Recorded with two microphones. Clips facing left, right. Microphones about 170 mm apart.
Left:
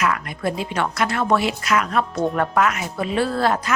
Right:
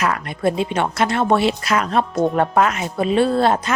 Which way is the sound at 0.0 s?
30° right (ahead or behind).